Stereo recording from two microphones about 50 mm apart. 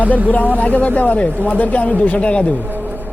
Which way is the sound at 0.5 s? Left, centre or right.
Left.